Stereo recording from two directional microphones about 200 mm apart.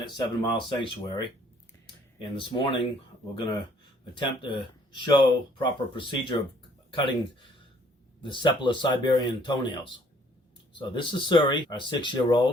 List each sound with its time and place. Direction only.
0.0 s speech: 25° left (ahead or behind)
2.3 s speech: 25° left (ahead or behind)
5.0 s speech: 20° left (ahead or behind)
8.2 s speech: 25° left (ahead or behind)